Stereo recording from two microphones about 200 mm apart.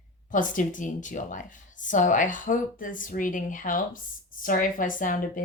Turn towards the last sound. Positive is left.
turn(degrees=40)  # may be behind; listen again after turning